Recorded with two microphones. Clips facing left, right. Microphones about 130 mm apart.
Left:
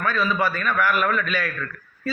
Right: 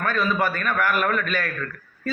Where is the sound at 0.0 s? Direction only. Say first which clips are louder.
Even; 50° right (ahead or behind).